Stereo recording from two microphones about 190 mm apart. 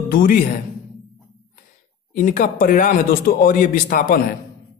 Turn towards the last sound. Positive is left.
turn(degrees=45)  # may be behind; listen again after turning